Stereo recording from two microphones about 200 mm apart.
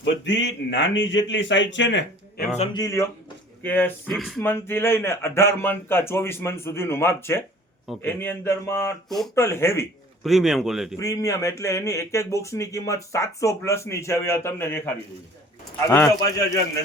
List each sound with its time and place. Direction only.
0.0 s speech: 65° left (ahead or behind)
2.7 s a man's voice: 15° left (ahead or behind); by 4.4 s centre (ahead or behind)
4.4 s speech: 10° left (ahead or behind)
9.0 s a man's voice: centre (ahead or behind)
9.3 s speech: 15° left (ahead or behind)
10.2 s a man's voice: centre (ahead or behind)
11.0 s speech: 15° left (ahead or behind)
15.9 s speech: 10° left (ahead or behind)